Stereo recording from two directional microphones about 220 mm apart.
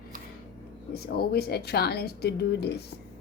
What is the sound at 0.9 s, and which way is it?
A woman's voice, 45° left (ahead or behind).